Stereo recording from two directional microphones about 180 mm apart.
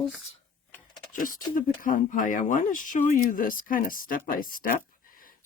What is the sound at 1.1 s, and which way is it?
Speech, 50° left (ahead or behind).